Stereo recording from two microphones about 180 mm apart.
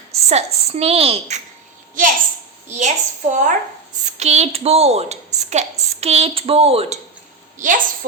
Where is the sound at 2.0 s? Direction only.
50° right (ahead or behind); by 7.0 s 35° right (ahead or behind).